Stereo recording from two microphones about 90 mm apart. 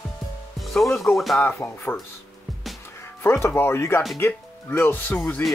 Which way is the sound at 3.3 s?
30° left (ahead or behind).